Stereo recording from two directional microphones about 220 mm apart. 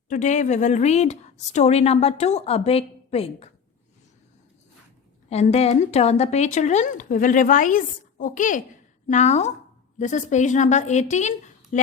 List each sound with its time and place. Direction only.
0.1 s a woman's voice: 35° left (ahead or behind)
5.3 s speech: 30° left (ahead or behind)